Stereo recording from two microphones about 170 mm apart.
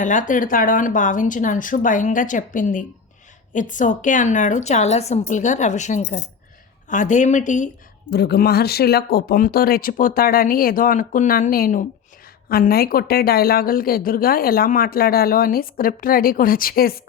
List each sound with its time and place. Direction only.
0.0 s speech: 50° left (ahead or behind)
8.1 s speech: 75° left (ahead or behind); by 17.0 s 60° left (ahead or behind)